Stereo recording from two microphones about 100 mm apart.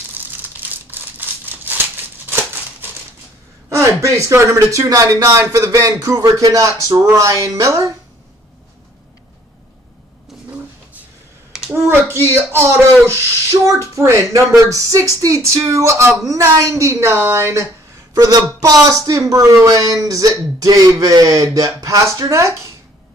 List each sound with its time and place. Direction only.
0.5 s crumpling: 20° right (ahead or behind)
3.7 s a woman's voice: 30° right (ahead or behind)
11.7 s a sound: 25° right (ahead or behind)
12.3 s a woman's voice: 25° right (ahead or behind)